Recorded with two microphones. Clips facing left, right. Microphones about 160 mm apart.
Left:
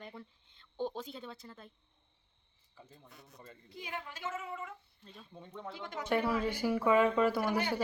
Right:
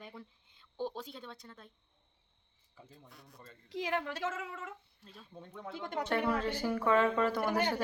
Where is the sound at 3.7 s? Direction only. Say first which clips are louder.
Right 9 dB; 85° right.